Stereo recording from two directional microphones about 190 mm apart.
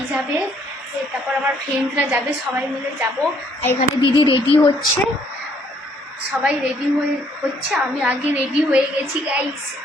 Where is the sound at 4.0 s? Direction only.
25° left (ahead or behind).